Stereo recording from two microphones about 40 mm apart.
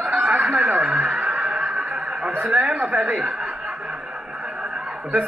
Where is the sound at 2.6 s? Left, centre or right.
Right.